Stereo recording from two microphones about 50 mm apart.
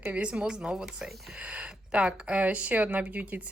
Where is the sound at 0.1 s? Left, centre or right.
Right.